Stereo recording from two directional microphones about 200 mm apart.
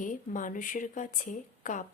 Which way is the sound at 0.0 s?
40° left (ahead or behind).